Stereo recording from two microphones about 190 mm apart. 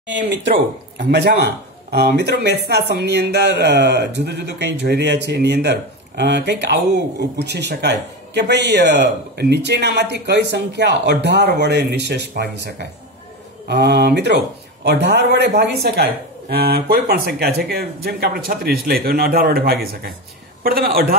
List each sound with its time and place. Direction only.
0.1 s a man's voice: 65° right (ahead or behind)